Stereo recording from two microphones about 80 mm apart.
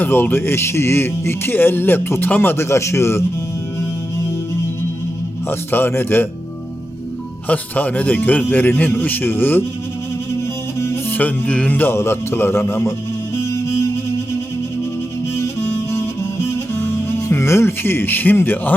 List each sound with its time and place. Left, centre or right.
0.0 s speech: left
5.5 s speech: left
7.4 s speech: centre
10.8 s music: left
11.2 s speech: centre; by 12.9 s left
15.4 s music: left